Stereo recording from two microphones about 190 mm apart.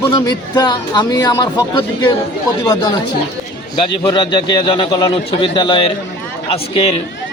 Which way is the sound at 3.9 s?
25° left (ahead or behind).